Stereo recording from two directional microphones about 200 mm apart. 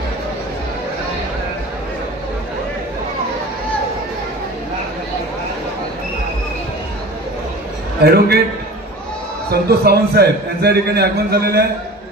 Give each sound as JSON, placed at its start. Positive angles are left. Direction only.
{"t": 8.0, "sound": "a man's voice", "side_deg": -50}
{"t": 9.5, "sound": "a man's voice", "side_deg": -50}